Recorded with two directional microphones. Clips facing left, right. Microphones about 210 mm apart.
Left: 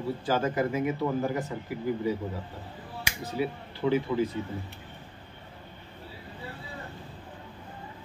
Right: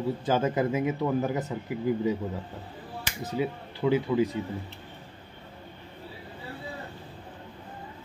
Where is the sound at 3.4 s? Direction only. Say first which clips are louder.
Right 1 dB; 20° right (ahead or behind).